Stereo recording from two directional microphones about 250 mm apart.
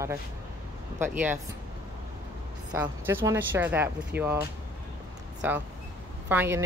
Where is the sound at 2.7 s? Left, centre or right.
Centre.